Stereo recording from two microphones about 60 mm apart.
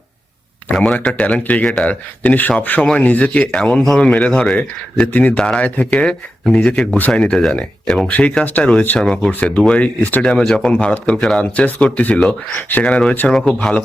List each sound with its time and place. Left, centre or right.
0.7 s speech: centre
4.5 s speech: left
5.4 s speech: centre
5.6 s speech: left
9.0 s speech: centre
9.6 s speech: left
10.2 s speech: centre
10.7 s speech: left
12.5 s speech: left